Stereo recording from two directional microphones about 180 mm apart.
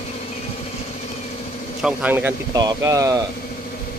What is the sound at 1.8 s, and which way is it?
Speech, 10° right (ahead or behind).